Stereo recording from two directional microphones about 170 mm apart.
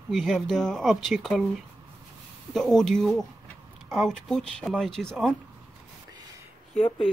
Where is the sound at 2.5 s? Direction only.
Centre (ahead or behind).